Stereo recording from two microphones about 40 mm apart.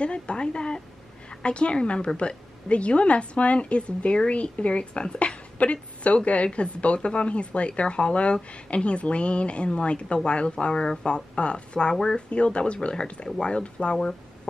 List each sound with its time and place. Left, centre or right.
0.0 s a woman's voice: left
12.3 s a woman's voice: left